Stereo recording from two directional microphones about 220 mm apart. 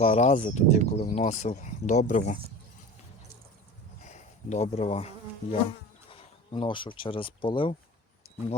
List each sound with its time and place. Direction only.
0.0 s speech: 30° left (ahead or behind)
4.0 s bee: 30° left (ahead or behind)
6.1 s speech: 25° left (ahead or behind)